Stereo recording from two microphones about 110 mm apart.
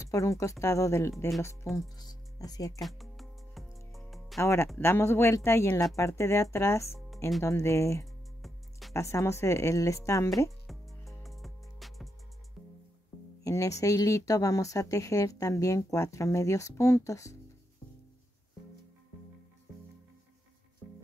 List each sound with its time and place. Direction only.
0.0 s speech: 30° left (ahead or behind)
1.8 s speech: 35° left (ahead or behind)
2.8 s music: centre (ahead or behind)
4.4 s speech: 25° left (ahead or behind)
8.4 s music: centre (ahead or behind)
8.9 s speech: 25° left (ahead or behind)
10.7 s music: centre (ahead or behind)
13.4 s speech: 30° left (ahead or behind)